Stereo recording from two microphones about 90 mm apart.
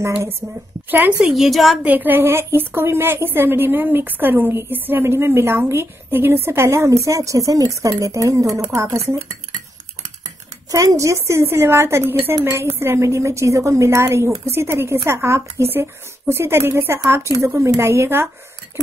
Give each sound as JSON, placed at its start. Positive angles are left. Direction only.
{"t": 0.8, "sound": "a woman's voice", "side_deg": -20}
{"t": 1.2, "sound": "a woman's voice", "side_deg": 0}
{"t": 1.8, "sound": "a woman's voice", "side_deg": -15}
{"t": 10.7, "sound": "a woman's voice", "side_deg": -40}